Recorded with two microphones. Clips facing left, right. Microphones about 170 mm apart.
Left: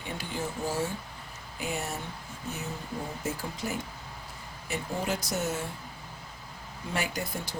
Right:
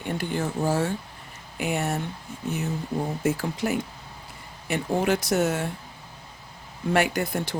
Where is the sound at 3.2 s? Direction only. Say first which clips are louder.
Right 9 dB; 70° right (ahead or behind).